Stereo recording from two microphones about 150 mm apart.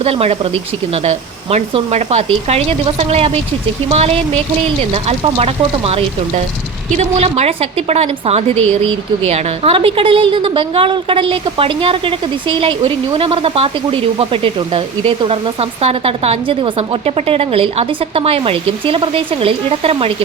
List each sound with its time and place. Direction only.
0.0 s a woman's voice: 40° right (ahead or behind)